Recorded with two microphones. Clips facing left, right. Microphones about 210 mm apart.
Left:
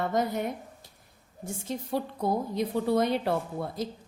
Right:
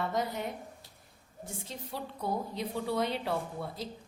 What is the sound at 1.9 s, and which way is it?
A woman's voice, 45° left (ahead or behind).